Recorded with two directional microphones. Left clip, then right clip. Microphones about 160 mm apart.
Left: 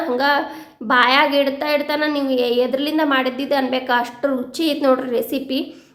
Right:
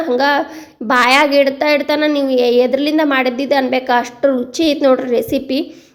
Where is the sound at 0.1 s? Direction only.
30° right (ahead or behind).